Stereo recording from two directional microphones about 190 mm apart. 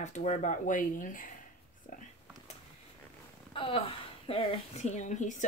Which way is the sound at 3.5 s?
30° left (ahead or behind).